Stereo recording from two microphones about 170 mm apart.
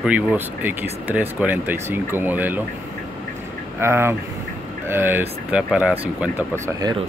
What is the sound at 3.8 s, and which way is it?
Speech, 15° right (ahead or behind).